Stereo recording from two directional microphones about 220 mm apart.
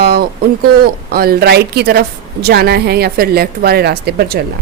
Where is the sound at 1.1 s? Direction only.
45° right (ahead or behind).